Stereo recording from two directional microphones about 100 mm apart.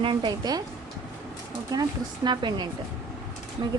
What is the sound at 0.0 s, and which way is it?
Speech, 50° right (ahead or behind).